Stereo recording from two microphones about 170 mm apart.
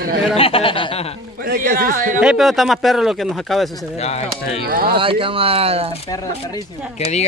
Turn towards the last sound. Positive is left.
turn(degrees=40)  # may be behind; listen again after turning